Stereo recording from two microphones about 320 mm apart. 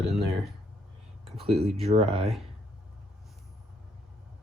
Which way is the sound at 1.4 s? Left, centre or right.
Centre.